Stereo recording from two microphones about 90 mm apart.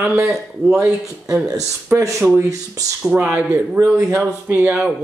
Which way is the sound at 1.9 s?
30° right (ahead or behind).